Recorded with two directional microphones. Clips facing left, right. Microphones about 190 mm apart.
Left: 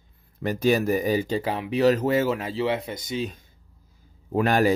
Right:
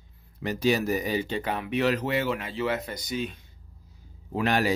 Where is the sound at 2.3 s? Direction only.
30° left (ahead or behind).